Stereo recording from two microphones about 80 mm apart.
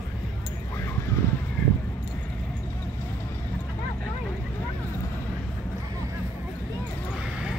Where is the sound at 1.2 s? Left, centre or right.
Left.